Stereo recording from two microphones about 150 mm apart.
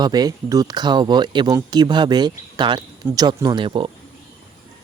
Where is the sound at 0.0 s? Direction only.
25° right (ahead or behind).